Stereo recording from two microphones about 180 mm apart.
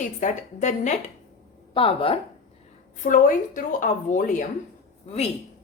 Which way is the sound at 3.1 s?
50° left (ahead or behind).